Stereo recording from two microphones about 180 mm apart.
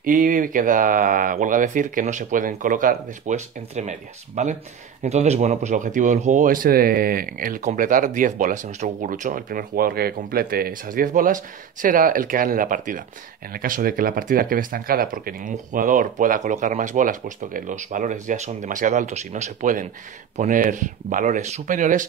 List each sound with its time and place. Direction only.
0.0 s speech: 50° right (ahead or behind)